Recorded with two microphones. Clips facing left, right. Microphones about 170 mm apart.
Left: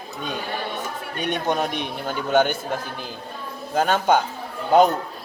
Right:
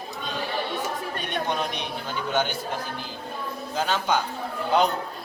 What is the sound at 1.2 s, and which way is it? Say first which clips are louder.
A man's voice: left 6 dB; 50° left (ahead or behind).